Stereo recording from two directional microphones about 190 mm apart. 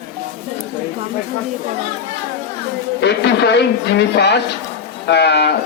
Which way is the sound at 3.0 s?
65° left (ahead or behind).